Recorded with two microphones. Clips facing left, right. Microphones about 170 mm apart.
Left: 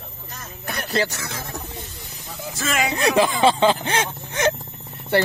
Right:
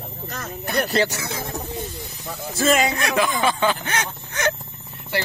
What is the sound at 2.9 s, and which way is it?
A man's voice, 30° left (ahead or behind).